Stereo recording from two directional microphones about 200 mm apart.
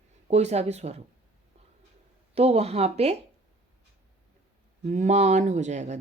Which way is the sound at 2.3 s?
30° right (ahead or behind).